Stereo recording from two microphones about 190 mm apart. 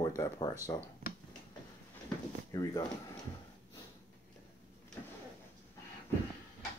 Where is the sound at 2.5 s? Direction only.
20° left (ahead or behind).